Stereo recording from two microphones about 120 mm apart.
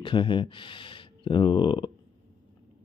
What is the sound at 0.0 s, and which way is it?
Speech, 45° left (ahead or behind).